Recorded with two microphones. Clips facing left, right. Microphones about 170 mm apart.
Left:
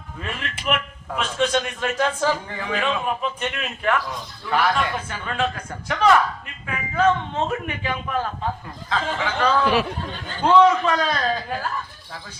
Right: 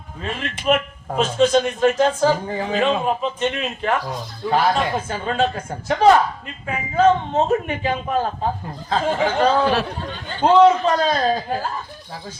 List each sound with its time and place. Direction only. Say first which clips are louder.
0.2 s a man's voice: right 4 dB; 30° right (ahead or behind)